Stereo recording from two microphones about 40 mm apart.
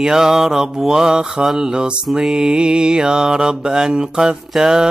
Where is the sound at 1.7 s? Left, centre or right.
Right.